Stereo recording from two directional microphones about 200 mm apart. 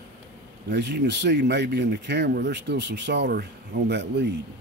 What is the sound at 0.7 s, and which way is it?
Speech, 60° right (ahead or behind).